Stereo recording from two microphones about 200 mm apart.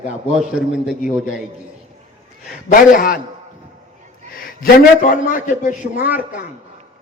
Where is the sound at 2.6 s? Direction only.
40° left (ahead or behind).